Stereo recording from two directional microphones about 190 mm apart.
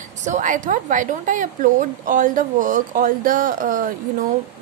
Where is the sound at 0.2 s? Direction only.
40° right (ahead or behind).